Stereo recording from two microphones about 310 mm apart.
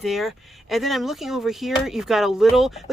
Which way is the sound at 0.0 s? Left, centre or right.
Centre.